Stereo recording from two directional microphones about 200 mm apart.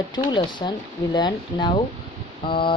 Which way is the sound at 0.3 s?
20° left (ahead or behind).